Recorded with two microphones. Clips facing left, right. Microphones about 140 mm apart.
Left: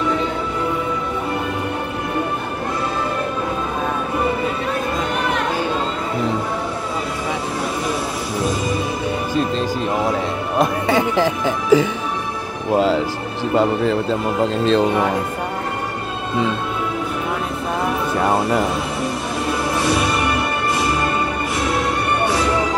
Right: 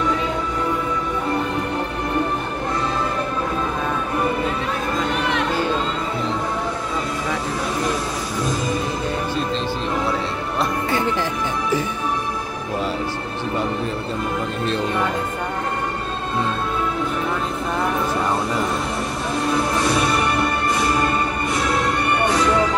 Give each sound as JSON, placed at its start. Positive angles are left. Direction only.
{"t": 11.1, "sound": "speech", "side_deg": 90}
{"t": 12.7, "sound": "music", "side_deg": 90}
{"t": 14.4, "sound": "speech", "side_deg": 90}